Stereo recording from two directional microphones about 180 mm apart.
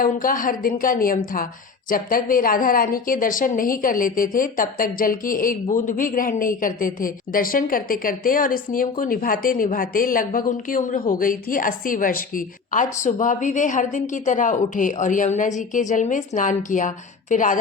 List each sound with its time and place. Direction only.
0.0 s a woman's voice: 50° left (ahead or behind)